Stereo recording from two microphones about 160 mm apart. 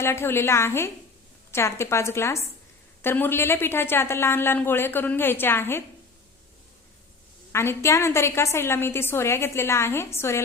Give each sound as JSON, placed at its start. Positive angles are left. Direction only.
{"t": 0.0, "sound": "a woman's voice", "side_deg": 15}
{"t": 7.5, "sound": "a woman's voice", "side_deg": 15}